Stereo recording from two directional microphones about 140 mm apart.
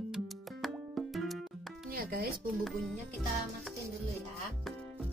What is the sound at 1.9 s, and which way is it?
Music, 90° right.